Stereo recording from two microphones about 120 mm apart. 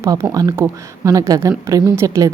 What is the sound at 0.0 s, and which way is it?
Speech, 25° right (ahead or behind).